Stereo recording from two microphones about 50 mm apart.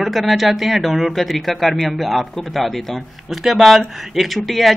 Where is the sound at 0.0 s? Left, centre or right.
Centre.